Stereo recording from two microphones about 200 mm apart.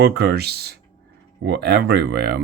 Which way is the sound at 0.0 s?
55° right (ahead or behind).